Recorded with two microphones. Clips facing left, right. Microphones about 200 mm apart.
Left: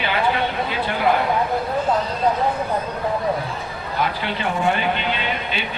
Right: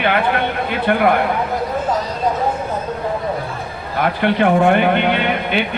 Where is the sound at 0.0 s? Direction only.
60° right (ahead or behind).